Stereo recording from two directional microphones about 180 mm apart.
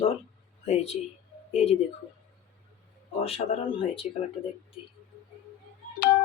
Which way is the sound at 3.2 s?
35° left (ahead or behind).